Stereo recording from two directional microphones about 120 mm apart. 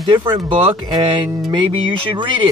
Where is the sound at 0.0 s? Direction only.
40° right (ahead or behind).